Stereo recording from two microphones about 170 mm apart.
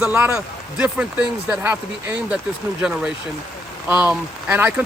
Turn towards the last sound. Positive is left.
turn(degrees=-10)  # may be behind; listen again after turning